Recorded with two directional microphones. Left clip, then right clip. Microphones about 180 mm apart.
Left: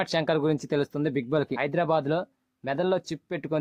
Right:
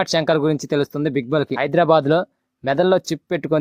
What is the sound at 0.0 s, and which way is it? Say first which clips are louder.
Speech: right 7 dB; 35° right (ahead or behind).